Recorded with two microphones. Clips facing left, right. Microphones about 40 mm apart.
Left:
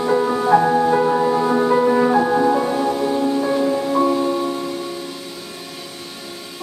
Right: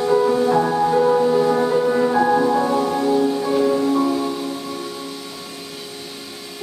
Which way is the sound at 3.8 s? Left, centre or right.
Centre.